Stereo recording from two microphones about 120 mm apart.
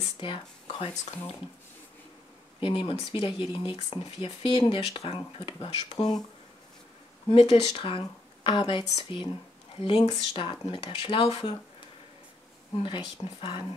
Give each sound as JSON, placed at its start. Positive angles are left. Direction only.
{"t": 0.0, "sound": "speech", "side_deg": 45}
{"t": 2.6, "sound": "speech", "side_deg": 45}
{"t": 7.2, "sound": "speech", "side_deg": 50}
{"t": 12.8, "sound": "speech", "side_deg": 45}